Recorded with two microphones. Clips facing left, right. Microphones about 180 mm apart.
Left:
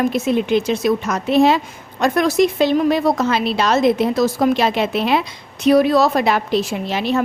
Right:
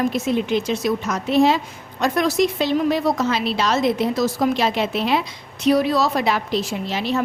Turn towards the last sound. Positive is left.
turn(degrees=55)  # may be behind; listen again after turning